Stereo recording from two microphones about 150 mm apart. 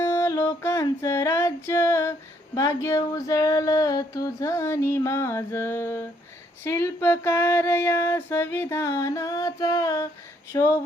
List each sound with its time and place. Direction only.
0.0 s female singing: 20° left (ahead or behind)
2.6 s a sound: 20° left (ahead or behind)
6.7 s female singing: 15° left (ahead or behind)